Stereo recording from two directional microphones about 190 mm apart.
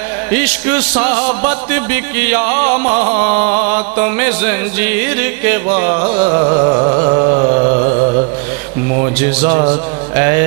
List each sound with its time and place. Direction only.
0.3 s music: 10° right (ahead or behind)
6.0 s a sound: 35° right (ahead or behind)
10.1 s music: 15° right (ahead or behind)